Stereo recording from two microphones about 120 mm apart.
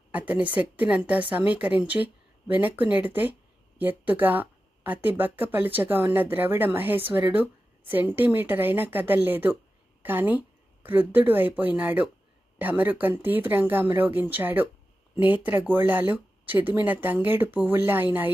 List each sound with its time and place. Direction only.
0.1 s speech: 10° right (ahead or behind)